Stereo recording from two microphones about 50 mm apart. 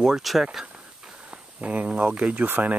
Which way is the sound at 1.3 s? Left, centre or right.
Right.